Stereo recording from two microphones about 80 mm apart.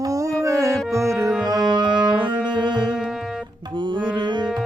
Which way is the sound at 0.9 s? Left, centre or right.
Right.